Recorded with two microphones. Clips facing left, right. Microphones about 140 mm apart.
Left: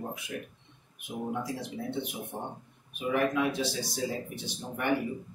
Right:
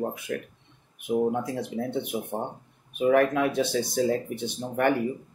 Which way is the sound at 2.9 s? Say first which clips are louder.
Right 7 dB; 55° right (ahead or behind).